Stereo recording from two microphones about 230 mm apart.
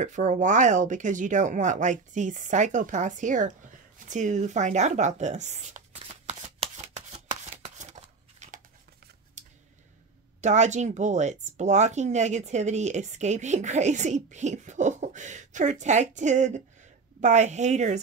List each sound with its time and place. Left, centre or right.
0.0 s speech: right
7.6 s scissors: right
10.4 s speech: right